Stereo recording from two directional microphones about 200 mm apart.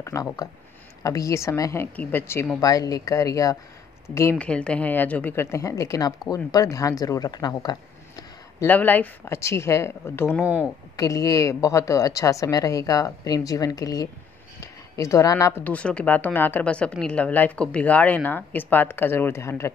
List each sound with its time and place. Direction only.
0.0 s speech: 15° left (ahead or behind)
8.6 s speech: 10° left (ahead or behind)
10.4 s speech: 5° right (ahead or behind)
11.0 s speech: 15° left (ahead or behind)